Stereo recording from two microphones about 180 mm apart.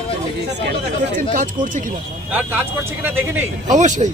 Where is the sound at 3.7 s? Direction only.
40° right (ahead or behind).